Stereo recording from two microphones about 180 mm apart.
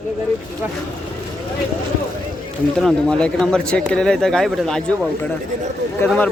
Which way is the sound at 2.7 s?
5° left (ahead or behind).